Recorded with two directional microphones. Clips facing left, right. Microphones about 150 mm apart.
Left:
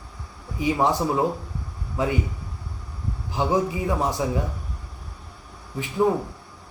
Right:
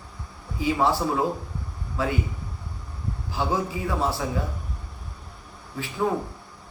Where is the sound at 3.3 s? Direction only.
20° left (ahead or behind).